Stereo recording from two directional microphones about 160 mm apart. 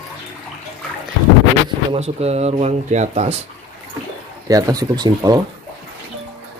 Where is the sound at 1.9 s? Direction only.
40° right (ahead or behind).